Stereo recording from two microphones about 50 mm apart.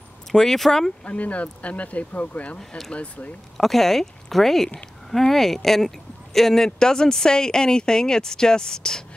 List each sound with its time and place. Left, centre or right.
0.3 s speech: centre
1.0 s speech: left
3.5 s speech: centre